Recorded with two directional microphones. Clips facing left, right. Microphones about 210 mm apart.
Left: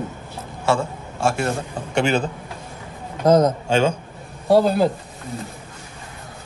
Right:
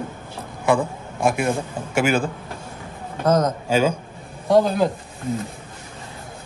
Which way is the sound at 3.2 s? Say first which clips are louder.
Left 4 dB; 10° left (ahead or behind).